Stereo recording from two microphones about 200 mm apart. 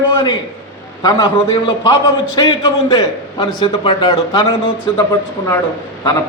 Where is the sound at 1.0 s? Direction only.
20° left (ahead or behind).